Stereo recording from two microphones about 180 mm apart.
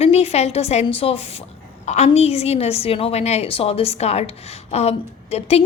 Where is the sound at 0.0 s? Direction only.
35° left (ahead or behind).